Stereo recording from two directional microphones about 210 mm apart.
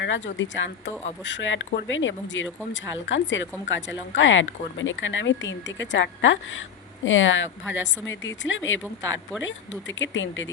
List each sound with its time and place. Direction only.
0.0 s speech: 60° left (ahead or behind)
10.0 s speech: 65° left (ahead or behind)